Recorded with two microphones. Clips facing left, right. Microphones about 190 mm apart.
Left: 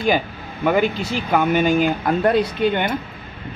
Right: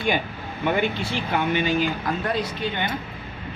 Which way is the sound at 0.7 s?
40° left (ahead or behind).